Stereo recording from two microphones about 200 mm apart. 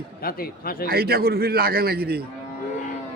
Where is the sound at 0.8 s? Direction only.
50° right (ahead or behind).